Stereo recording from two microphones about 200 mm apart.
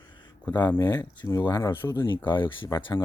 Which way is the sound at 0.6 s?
15° left (ahead or behind).